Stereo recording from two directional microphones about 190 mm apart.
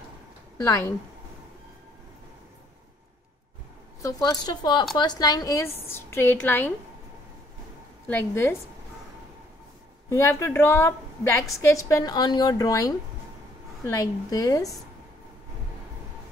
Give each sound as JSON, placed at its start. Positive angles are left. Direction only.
{"t": 0.7, "sound": "a woman's voice", "side_deg": 15}
{"t": 4.0, "sound": "a woman's voice", "side_deg": 20}
{"t": 8.1, "sound": "a woman's voice", "side_deg": 10}
{"t": 10.0, "sound": "a woman's voice", "side_deg": 15}